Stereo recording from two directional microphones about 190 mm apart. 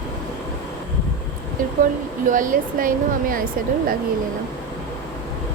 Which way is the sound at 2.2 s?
45° right (ahead or behind).